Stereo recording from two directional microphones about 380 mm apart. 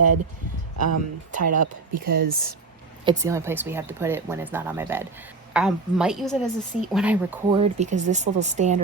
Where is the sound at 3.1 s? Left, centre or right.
Centre.